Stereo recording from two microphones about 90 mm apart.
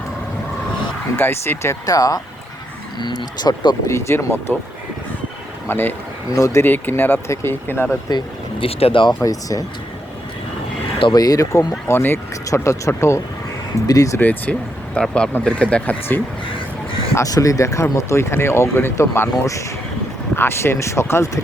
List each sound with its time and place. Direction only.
1.2 s speech: 25° left (ahead or behind)
1.9 s speech: 40° left (ahead or behind)
3.0 s speech: 55° left (ahead or behind)
3.8 s speech: 35° left (ahead or behind)
5.6 s speech: 25° left (ahead or behind)
6.3 s speech: 35° left (ahead or behind)
6.7 s speech: 20° left (ahead or behind)
8.1 s speech: 80° left
9.2 s speech: 40° left (ahead or behind)
11.1 s speech: 45° left (ahead or behind)
13.8 s speech: 40° left (ahead or behind)
14.2 s speech: 20° left (ahead or behind)
17.2 s speech: 40° left (ahead or behind)